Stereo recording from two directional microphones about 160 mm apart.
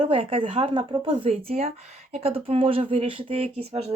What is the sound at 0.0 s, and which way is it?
Speech, 35° right (ahead or behind).